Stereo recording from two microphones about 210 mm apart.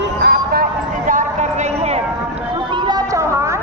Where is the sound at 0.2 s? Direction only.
50° right (ahead or behind).